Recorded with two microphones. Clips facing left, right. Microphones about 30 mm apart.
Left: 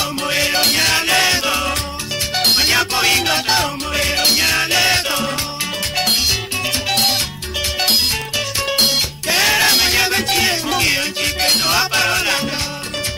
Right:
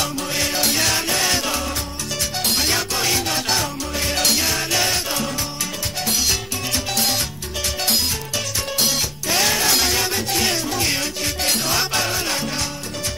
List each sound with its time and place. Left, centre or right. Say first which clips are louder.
0.3 s music: left 7 dB; left
2.3 s music: left 7 dB; left
4.1 s music: left 3 dB; left
4.4 s music: left 5 dB; left
8.7 s music: left 6 dB; left
9.3 s music: left 5 dB; left
11.4 s music: left 6 dB; left
11.7 s music: left 5 dB; left